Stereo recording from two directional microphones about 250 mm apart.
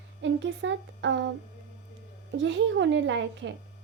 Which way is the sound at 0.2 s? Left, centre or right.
Right.